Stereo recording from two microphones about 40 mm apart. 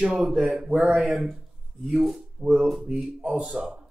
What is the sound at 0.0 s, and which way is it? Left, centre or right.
Speech, right.